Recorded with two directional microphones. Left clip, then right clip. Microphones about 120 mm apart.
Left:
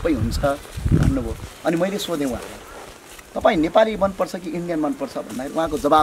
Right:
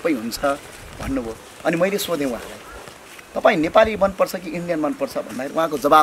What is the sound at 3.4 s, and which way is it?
Speech, 5° right (ahead or behind).